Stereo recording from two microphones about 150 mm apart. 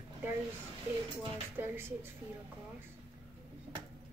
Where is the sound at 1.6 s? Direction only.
15° right (ahead or behind).